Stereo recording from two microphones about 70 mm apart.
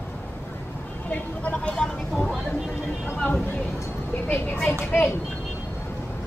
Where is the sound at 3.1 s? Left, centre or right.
Left.